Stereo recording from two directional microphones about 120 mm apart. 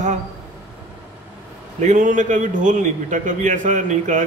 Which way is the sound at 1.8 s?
90° right.